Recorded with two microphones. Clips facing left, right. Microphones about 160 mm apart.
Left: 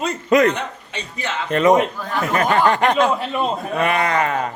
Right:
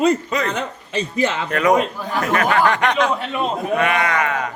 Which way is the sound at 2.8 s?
Centre (ahead or behind).